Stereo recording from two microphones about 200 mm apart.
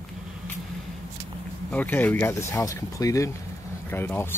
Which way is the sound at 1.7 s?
10° left (ahead or behind).